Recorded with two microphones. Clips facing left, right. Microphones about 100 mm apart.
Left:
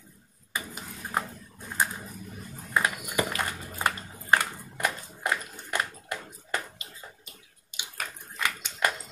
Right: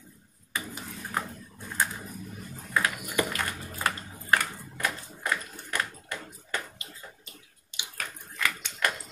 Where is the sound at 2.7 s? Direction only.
20° left (ahead or behind).